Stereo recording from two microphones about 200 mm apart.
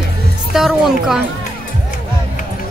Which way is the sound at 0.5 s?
Centre (ahead or behind).